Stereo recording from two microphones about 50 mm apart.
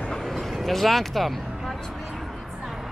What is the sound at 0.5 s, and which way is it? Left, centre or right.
Speech, centre.